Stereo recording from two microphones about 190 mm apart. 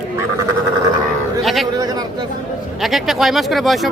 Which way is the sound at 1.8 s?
20° right (ahead or behind).